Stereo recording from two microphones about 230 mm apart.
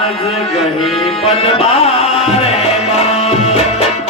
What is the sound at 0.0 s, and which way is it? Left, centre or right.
Music, left.